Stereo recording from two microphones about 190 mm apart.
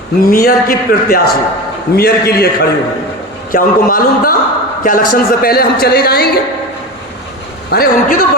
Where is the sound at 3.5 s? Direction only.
50° left (ahead or behind).